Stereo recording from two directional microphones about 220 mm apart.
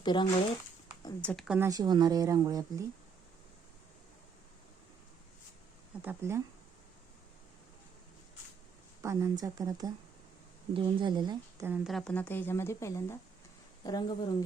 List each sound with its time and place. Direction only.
0.0 s speech: 20° left (ahead or behind)
1.2 s speech: 5° left (ahead or behind)
1.5 s speech: 15° right (ahead or behind)
6.0 s speech: 10° right (ahead or behind)
9.0 s speech: 15° right (ahead or behind)
11.7 s a woman's voice: centre (ahead or behind); by 14.0 s 15° left (ahead or behind)